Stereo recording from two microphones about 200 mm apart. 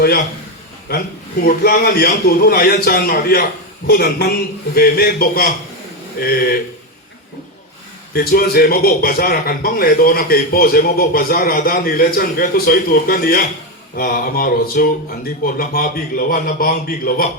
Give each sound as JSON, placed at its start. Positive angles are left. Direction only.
{"t": 0.9, "sound": "a man's voice", "side_deg": 50}
{"t": 8.1, "sound": "a man's voice", "side_deg": 50}